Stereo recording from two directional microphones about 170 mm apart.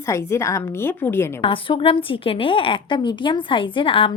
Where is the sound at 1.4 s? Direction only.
30° left (ahead or behind).